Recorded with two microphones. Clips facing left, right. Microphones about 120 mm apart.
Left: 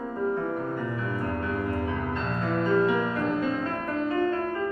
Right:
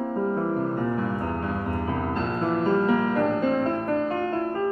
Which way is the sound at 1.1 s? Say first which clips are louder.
Right 1 dB; 30° right (ahead or behind).